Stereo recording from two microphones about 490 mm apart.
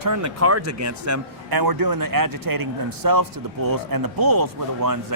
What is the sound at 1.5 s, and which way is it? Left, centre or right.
Speech, right.